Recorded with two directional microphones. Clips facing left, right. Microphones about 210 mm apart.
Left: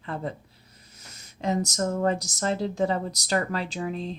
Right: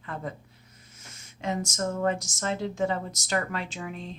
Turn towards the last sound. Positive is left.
turn(degrees=35)  # may be behind; listen again after turning